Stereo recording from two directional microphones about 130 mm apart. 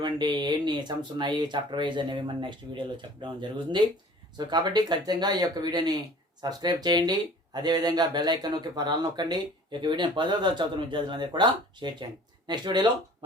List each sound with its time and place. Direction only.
0.0 s speech: 35° right (ahead or behind)